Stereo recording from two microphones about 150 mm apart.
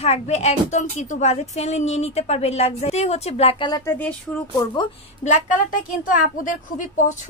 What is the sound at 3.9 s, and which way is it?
Speech, 15° left (ahead or behind).